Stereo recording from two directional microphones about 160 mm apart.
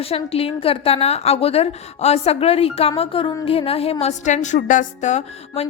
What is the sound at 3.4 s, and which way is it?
A woman's voice, 35° left (ahead or behind).